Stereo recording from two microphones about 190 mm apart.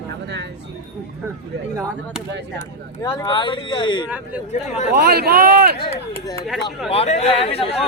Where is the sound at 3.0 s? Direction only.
15° left (ahead or behind).